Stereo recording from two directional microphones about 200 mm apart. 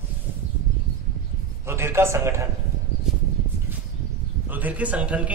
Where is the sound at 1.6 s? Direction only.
15° right (ahead or behind).